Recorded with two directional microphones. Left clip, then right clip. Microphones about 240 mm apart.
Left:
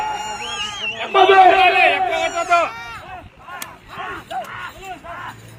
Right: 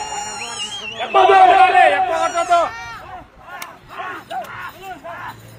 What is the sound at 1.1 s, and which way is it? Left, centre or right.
Speech, left.